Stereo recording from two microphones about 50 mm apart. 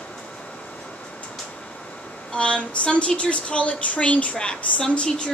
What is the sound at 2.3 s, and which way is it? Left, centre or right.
A woman's voice, left.